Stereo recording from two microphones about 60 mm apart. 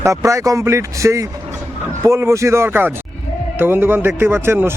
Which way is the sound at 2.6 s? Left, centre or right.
Right.